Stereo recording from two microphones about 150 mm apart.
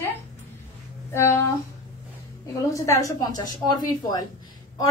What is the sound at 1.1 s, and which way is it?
A woman's voice, 20° left (ahead or behind).